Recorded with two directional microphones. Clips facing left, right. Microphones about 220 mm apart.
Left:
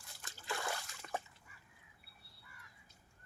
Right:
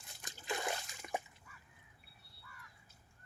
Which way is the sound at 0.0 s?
15° right (ahead or behind).